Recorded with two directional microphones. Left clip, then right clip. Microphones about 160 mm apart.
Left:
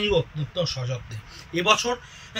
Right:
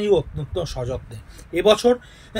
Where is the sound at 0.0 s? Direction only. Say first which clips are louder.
Right 4 dB; 50° right (ahead or behind).